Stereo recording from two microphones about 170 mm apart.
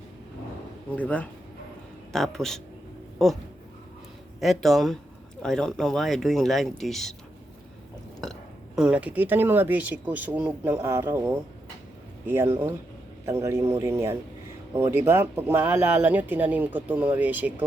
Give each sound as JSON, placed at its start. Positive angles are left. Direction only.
{"t": 0.9, "sound": "speech", "side_deg": 10}
{"t": 4.4, "sound": "speech", "side_deg": 0}
{"t": 8.2, "sound": "speech", "side_deg": 0}